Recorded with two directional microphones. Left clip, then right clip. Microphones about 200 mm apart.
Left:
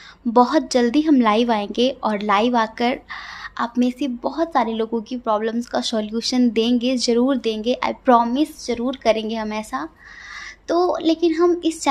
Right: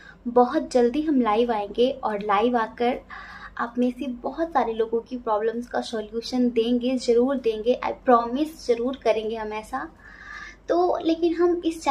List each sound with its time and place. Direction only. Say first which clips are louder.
0.3 s a woman's voice: left 3 dB; 50° left (ahead or behind)